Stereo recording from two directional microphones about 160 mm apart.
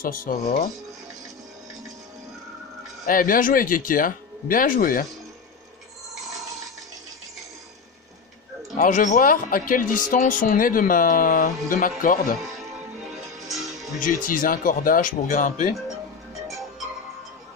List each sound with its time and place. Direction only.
0.0 s speech: 60° left (ahead or behind)
3.1 s speech: 60° left (ahead or behind)
8.7 s speech: 55° left (ahead or behind)
13.9 s speech: 55° left (ahead or behind)